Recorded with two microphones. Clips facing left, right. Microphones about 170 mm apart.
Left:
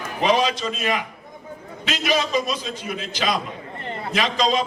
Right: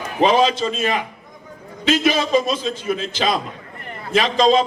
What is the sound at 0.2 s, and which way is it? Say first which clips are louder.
A man's voice: right 4 dB; 30° right (ahead or behind).